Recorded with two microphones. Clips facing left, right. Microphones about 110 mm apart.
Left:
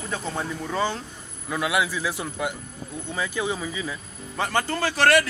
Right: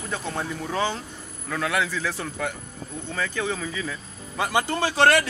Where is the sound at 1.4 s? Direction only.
10° left (ahead or behind).